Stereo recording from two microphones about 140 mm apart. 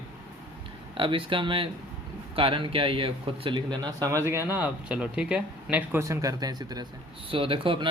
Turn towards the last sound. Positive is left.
turn(degrees=-40)  # may be behind; listen again after turning